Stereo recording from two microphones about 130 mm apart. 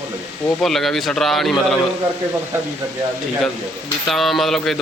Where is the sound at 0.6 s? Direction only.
Centre (ahead or behind).